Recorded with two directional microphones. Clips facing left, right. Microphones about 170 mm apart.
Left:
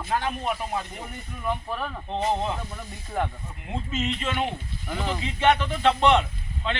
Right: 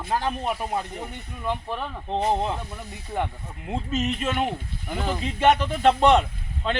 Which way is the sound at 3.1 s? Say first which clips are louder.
Even; 20° right (ahead or behind).